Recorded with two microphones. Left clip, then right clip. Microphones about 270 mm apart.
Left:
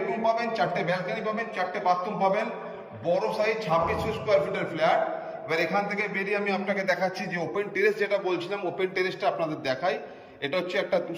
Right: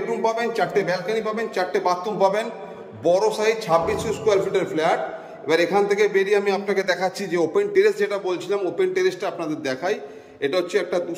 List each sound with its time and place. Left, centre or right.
0.2 s a man's voice: right